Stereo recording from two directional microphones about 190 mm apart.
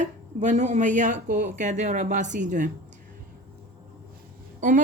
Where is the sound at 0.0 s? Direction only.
40° right (ahead or behind).